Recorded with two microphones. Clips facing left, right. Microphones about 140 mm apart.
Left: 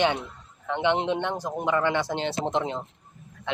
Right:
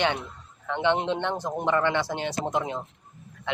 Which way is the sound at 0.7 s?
15° left (ahead or behind).